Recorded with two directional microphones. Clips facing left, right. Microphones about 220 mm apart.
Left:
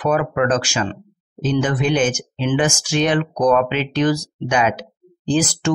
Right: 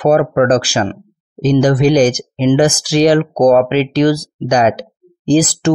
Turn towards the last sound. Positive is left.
turn(degrees=-35)  # may be behind; listen again after turning